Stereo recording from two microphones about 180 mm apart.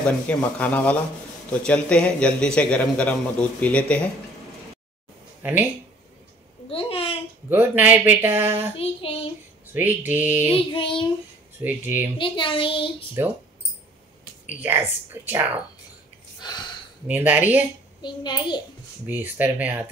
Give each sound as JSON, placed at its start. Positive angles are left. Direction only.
{"t": 0.0, "sound": "a man's voice", "side_deg": 10}
{"t": 5.4, "sound": "speech", "side_deg": -10}
{"t": 6.7, "sound": "a child's voice", "side_deg": 30}
{"t": 7.4, "sound": "speech", "side_deg": -10}
{"t": 9.8, "sound": "speech", "side_deg": -10}
{"t": 10.5, "sound": "a child's voice", "side_deg": 30}
{"t": 11.6, "sound": "speech", "side_deg": -10}
{"t": 12.2, "sound": "a child's voice", "side_deg": 30}
{"t": 13.2, "sound": "speech", "side_deg": -15}
{"t": 14.5, "sound": "speech", "side_deg": -10}
{"t": 16.3, "sound": "a sound", "side_deg": 25}
{"t": 17.1, "sound": "speech", "side_deg": -10}
{"t": 18.0, "sound": "a child's voice", "side_deg": 25}
{"t": 19.0, "sound": "speech", "side_deg": -10}